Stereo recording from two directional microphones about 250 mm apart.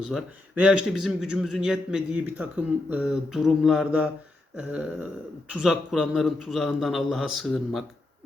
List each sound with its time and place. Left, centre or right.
0.0 s a man's voice: centre